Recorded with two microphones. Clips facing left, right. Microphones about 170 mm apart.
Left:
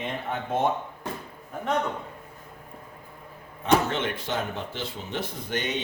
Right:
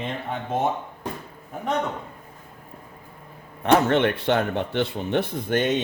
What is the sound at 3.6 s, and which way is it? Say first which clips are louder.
Speech: right 5 dB; 65° right (ahead or behind).